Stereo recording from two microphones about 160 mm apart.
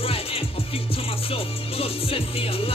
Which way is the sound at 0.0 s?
35° left (ahead or behind).